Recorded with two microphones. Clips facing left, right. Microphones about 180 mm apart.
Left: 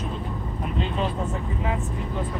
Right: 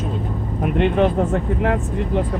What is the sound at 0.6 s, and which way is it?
Speech, 70° right (ahead or behind).